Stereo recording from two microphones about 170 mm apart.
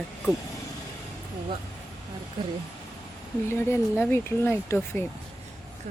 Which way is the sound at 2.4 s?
25° right (ahead or behind).